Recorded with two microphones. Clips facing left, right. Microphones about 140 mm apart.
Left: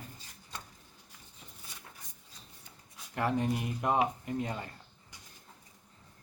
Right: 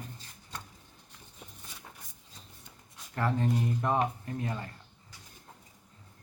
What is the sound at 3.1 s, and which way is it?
Speech, 15° left (ahead or behind).